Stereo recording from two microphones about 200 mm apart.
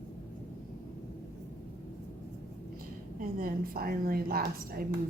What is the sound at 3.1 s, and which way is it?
A woman's voice, 45° right (ahead or behind).